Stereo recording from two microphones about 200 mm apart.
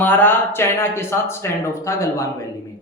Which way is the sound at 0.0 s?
10° left (ahead or behind).